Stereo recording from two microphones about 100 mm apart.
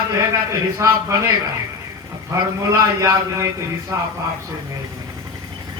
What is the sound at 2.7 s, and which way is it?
A man's voice, 30° right (ahead or behind).